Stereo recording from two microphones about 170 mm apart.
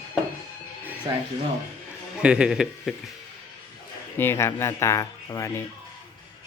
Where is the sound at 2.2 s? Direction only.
5° right (ahead or behind).